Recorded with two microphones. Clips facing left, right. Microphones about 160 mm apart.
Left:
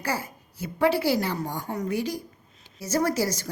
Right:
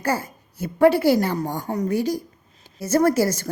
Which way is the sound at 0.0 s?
50° right (ahead or behind).